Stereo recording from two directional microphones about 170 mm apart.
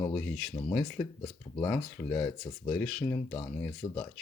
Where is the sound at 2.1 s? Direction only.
20° left (ahead or behind).